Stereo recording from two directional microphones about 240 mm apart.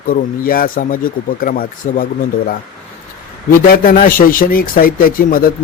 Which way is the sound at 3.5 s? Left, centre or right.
Left.